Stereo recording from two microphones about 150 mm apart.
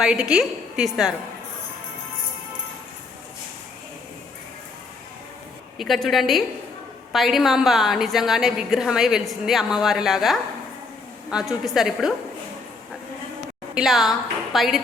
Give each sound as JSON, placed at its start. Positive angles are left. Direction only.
{"t": 0.0, "sound": "a woman's voice", "side_deg": -5}
{"t": 5.7, "sound": "a woman's voice", "side_deg": 0}
{"t": 13.7, "sound": "a woman's voice", "side_deg": 0}